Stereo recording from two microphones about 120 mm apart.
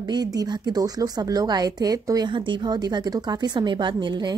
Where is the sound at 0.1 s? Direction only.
35° right (ahead or behind).